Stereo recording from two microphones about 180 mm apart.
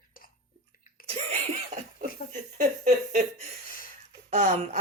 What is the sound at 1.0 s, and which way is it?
Laughter, 35° right (ahead or behind).